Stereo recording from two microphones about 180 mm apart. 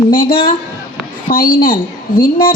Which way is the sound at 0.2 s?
30° left (ahead or behind).